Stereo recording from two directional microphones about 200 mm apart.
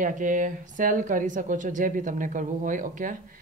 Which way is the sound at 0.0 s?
40° right (ahead or behind).